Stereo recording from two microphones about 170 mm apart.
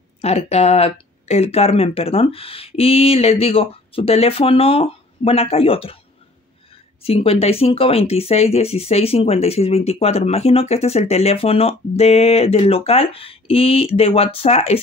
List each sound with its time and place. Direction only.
0.2 s speech: 40° left (ahead or behind)
7.0 s speech: 35° left (ahead or behind)